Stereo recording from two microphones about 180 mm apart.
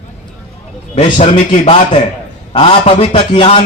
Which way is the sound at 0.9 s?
40° left (ahead or behind).